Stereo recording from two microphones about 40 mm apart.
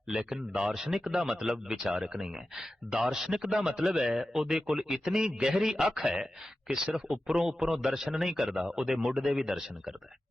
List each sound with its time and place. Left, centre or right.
0.1 s a man's voice: centre